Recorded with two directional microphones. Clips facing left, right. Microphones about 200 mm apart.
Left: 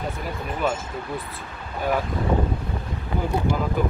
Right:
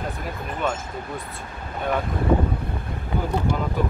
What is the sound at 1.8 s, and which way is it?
Speech, 5° left (ahead or behind).